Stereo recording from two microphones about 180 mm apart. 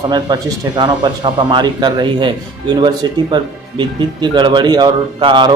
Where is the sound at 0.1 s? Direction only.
20° right (ahead or behind).